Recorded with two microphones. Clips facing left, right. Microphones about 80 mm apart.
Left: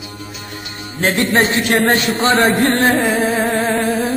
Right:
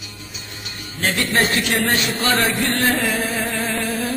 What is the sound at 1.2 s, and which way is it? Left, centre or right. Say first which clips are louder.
Music: left 4 dB; left.